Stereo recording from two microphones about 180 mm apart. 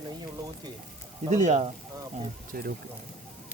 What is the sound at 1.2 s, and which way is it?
Speech, 40° right (ahead or behind).